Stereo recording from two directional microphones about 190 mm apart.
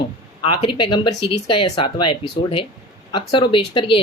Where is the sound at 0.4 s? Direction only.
25° left (ahead or behind).